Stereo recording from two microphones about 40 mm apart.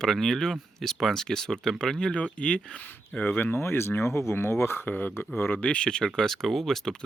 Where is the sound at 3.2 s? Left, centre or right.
Left.